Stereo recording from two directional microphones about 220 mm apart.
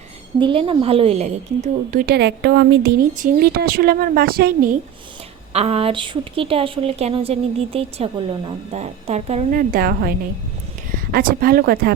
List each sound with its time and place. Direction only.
0.3 s a woman's voice: 25° right (ahead or behind); by 4.8 s 40° right (ahead or behind)
5.5 s a woman's voice: 30° right (ahead or behind); by 11.9 s 45° right (ahead or behind)